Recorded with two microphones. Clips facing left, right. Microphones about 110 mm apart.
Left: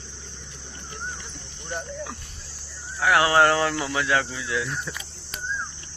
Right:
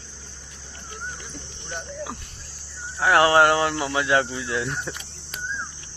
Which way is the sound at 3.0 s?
25° right (ahead or behind).